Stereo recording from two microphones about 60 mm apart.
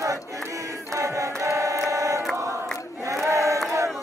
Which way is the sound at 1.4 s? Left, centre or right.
Right.